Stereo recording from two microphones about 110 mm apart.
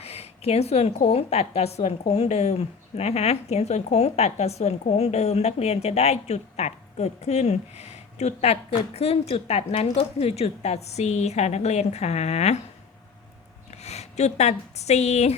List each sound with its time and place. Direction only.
0.0 s a woman's voice: 65° left (ahead or behind)
13.8 s a woman's voice: 85° left